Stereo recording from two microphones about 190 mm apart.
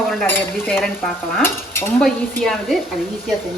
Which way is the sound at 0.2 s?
10° left (ahead or behind).